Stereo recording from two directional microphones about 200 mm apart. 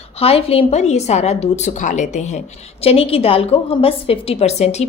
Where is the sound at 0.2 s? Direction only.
30° left (ahead or behind).